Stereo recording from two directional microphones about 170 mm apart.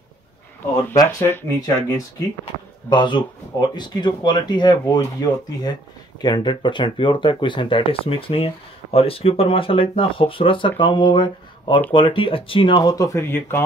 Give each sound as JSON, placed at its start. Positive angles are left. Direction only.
{"t": 0.9, "sound": "speech", "side_deg": 15}
{"t": 2.9, "sound": "speech", "side_deg": 25}